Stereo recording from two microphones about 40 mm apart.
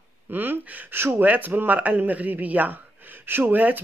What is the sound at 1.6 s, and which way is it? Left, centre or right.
Speech, right.